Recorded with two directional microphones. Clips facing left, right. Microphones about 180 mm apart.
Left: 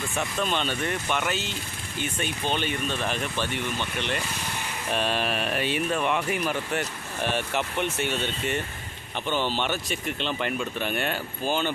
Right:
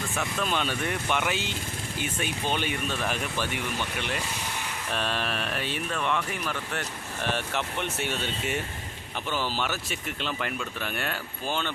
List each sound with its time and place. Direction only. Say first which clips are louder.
0.2 s speech: left 2 dB; centre (ahead or behind)
4.9 s speech: left 4 dB; 5° left (ahead or behind)
9.6 s speech: left 4 dB; 5° right (ahead or behind)
10.2 s speech: left 3 dB; 25° left (ahead or behind)
11.4 s speech: left 4 dB; 5° left (ahead or behind)